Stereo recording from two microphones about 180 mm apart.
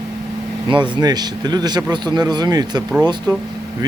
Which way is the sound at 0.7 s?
25° right (ahead or behind).